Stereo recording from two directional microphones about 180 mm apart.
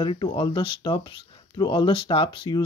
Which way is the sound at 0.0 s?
25° left (ahead or behind).